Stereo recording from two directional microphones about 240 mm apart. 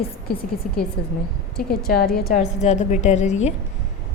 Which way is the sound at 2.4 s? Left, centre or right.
Left.